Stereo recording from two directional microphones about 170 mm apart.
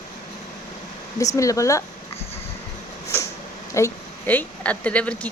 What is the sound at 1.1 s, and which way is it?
Speech, 20° left (ahead or behind).